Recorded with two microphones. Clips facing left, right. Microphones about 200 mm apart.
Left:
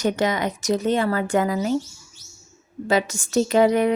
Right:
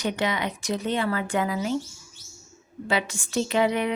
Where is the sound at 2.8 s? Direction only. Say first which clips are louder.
Left 5 dB; 40° left (ahead or behind).